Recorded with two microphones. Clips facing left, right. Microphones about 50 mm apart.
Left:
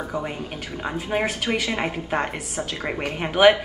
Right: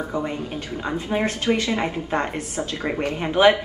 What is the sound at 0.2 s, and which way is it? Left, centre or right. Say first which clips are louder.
A woman's voice: right 3 dB; centre.